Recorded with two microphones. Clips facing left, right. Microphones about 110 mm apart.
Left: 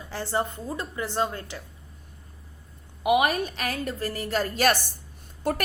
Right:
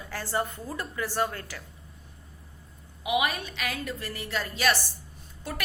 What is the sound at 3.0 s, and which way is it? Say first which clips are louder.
A woman's voice: left 6 dB; 45° left (ahead or behind).